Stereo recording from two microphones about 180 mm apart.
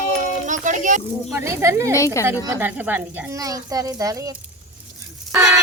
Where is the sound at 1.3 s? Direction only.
10° right (ahead or behind).